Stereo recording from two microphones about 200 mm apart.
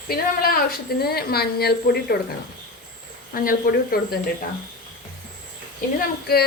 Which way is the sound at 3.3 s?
45° left (ahead or behind).